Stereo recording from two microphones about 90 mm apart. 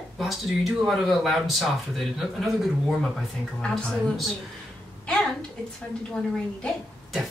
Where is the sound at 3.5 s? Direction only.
5° left (ahead or behind).